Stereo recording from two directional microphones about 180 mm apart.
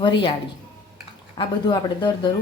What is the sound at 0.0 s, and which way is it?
Speech, 25° left (ahead or behind).